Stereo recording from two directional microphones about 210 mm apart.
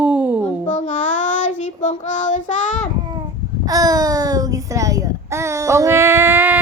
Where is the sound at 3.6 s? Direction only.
15° right (ahead or behind).